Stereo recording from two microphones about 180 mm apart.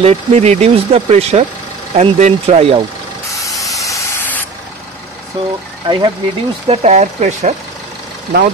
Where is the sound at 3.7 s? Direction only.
15° left (ahead or behind).